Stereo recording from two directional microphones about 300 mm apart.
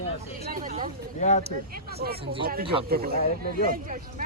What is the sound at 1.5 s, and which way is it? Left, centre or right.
Speech, right.